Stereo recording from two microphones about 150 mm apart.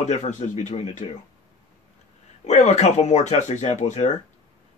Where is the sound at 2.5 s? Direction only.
50° left (ahead or behind).